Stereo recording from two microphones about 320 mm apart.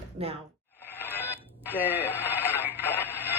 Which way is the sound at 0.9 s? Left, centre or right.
Centre.